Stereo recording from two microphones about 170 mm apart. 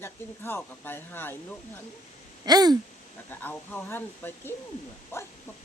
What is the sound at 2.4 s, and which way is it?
Speech, 25° right (ahead or behind).